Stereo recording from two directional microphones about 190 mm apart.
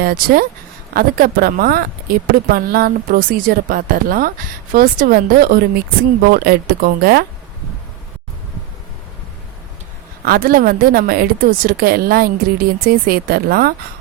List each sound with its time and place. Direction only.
0.0 s a woman's voice: 50° right (ahead or behind)
10.2 s a woman's voice: 50° right (ahead or behind)